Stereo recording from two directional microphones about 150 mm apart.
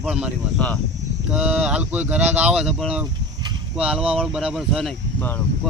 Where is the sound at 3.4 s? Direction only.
30° right (ahead or behind).